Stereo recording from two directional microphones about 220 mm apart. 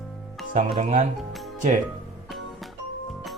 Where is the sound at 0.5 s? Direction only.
35° right (ahead or behind).